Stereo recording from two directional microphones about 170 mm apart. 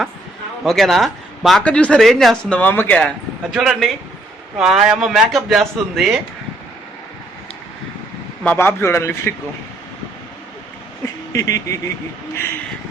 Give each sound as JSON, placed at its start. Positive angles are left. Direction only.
{"t": 0.6, "sound": "speech", "side_deg": 0}
{"t": 3.5, "sound": "speech", "side_deg": 0}
{"t": 8.4, "sound": "speech", "side_deg": 15}
{"t": 11.3, "sound": "speech", "side_deg": 20}